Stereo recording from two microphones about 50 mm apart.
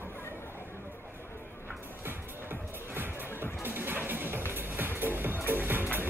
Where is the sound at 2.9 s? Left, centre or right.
Right.